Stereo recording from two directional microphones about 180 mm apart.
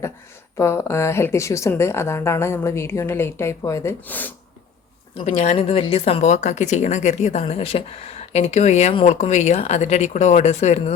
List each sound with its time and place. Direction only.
0.5 s a woman's voice: 15° left (ahead or behind)
5.2 s speech: 40° left (ahead or behind)